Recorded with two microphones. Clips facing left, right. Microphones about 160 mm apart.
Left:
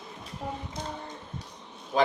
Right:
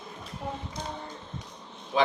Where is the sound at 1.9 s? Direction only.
40° left (ahead or behind).